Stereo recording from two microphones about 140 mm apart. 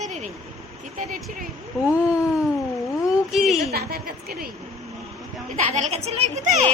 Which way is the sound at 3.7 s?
90° right.